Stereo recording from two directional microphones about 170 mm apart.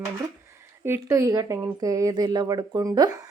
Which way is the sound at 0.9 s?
15° right (ahead or behind).